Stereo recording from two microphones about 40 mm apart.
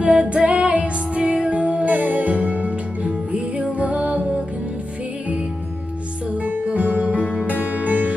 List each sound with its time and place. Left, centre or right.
0.0 s music: right
6.4 s music: right